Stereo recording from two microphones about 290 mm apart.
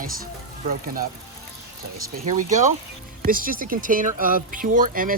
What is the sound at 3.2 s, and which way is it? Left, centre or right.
Speech, right.